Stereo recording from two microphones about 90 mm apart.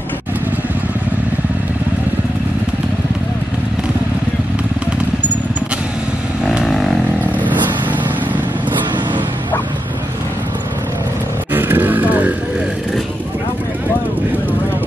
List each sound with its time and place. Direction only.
6.4 s vehicle: 5° right (ahead or behind)
7.3 s vehicle: 20° right (ahead or behind)
11.5 s roaring cats: 20° right (ahead or behind)